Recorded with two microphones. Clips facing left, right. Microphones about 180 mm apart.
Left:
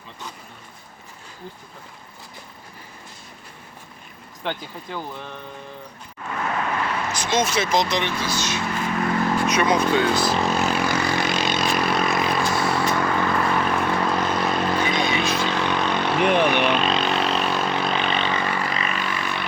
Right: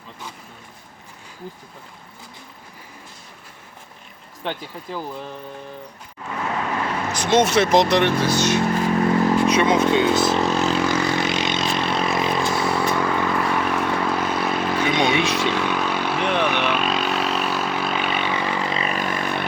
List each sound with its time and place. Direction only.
4.4 s speech: centre (ahead or behind)
7.1 s speech: 60° right (ahead or behind)
8.6 s vehicle: 35° right (ahead or behind)
10.5 s vehicle: 15° left (ahead or behind)
10.9 s vehicle: 20° right (ahead or behind); by 14.9 s 5° right (ahead or behind)
14.9 s speech: 80° right
15.4 s vehicle: 5° right (ahead or behind)
16.2 s speech: 10° left (ahead or behind)
16.5 s vehicle: 5° right (ahead or behind); by 19.5 s 50° right (ahead or behind)